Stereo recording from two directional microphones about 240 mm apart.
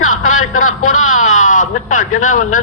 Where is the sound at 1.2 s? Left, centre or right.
Left.